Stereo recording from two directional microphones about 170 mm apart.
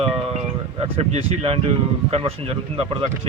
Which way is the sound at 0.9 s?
35° right (ahead or behind).